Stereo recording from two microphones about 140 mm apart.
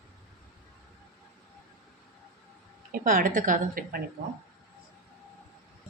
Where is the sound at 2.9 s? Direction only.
80° right.